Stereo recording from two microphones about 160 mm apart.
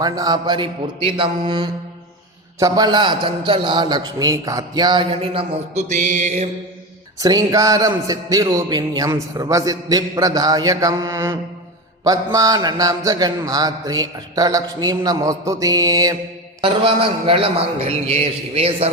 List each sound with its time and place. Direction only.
0.0 s a man's voice: 25° right (ahead or behind)
5.9 s music: 50° right (ahead or behind)
7.2 s speech: 20° right (ahead or behind)
16.6 s a man's voice: 35° right (ahead or behind)